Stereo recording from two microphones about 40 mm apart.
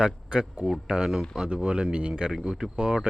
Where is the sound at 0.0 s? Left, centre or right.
Right.